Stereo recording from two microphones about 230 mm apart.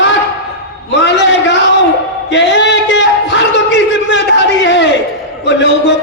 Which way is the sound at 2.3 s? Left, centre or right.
Left.